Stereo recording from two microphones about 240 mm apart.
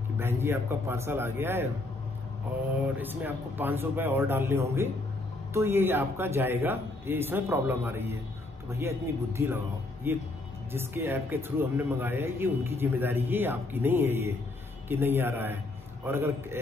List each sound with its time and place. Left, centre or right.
0.2 s speech: centre
3.0 s speech: centre